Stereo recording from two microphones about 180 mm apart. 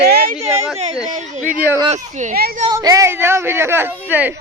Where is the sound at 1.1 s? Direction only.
40° right (ahead or behind).